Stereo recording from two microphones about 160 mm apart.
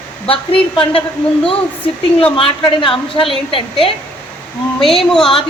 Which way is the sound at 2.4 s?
35° left (ahead or behind).